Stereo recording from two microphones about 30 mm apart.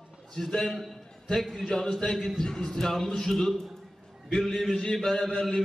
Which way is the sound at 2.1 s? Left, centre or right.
Centre.